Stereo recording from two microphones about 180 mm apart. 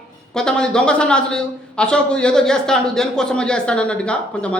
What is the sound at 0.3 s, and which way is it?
A man's voice, 5° left (ahead or behind).